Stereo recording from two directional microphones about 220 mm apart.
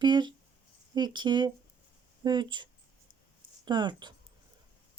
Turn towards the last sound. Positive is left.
turn(degrees=-20)  # may be behind; listen again after turning